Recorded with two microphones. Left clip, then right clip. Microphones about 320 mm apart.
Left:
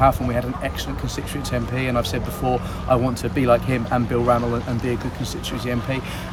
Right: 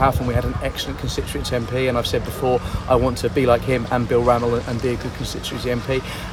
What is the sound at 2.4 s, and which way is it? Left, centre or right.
Speech, right.